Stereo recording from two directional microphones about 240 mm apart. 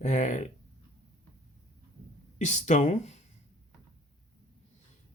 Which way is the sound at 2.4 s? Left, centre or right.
Left.